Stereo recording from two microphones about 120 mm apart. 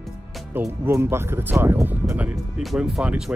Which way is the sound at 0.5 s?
15° right (ahead or behind).